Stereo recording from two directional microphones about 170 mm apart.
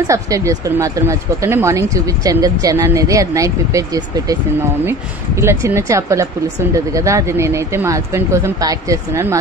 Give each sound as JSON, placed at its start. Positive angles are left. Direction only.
{"t": 0.0, "sound": "speech", "side_deg": -20}